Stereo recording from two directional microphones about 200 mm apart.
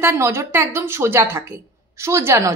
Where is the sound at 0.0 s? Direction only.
15° right (ahead or behind).